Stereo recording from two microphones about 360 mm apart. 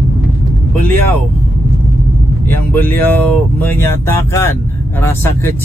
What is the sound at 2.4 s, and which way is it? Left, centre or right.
Speech, centre.